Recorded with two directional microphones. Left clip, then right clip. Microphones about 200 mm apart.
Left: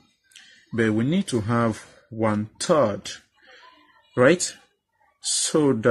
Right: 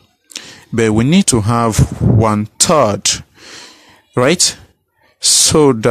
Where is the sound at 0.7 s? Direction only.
50° right (ahead or behind).